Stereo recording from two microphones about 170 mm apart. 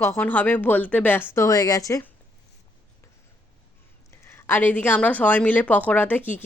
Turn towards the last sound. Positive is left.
turn(degrees=10)  # may be behind; listen again after turning